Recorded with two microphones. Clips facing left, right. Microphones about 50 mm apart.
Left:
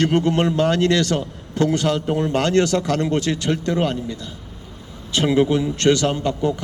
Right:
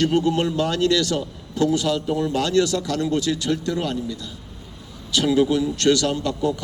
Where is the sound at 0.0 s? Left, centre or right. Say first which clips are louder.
Left 2 dB; left.